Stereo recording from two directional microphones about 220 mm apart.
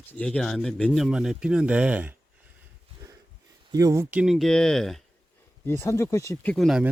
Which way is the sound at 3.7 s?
15° right (ahead or behind).